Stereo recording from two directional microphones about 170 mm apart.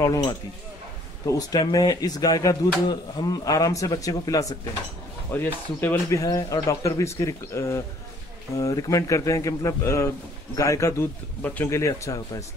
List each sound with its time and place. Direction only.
0.0 s speech: 20° left (ahead or behind)